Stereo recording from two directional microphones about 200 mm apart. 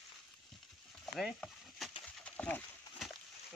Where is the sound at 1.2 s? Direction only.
Centre (ahead or behind).